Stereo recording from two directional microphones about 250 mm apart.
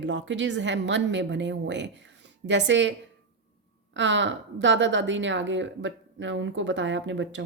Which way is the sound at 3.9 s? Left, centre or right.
Right.